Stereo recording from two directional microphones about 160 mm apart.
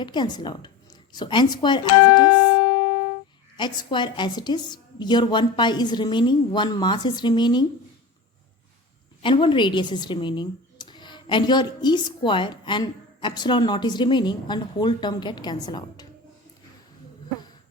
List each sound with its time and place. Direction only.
0.0 s speech: 30° left (ahead or behind)
2.3 s music: 90° left
3.6 s speech: 30° left (ahead or behind)
9.2 s speech: 30° left (ahead or behind)